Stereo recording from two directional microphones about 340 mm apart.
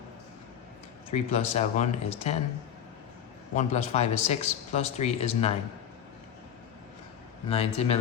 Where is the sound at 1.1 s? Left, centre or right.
Centre.